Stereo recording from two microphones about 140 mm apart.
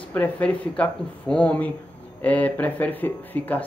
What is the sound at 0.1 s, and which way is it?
Speech, 10° left (ahead or behind).